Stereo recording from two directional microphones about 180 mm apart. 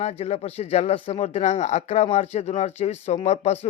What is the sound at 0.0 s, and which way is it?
Speech, 35° left (ahead or behind).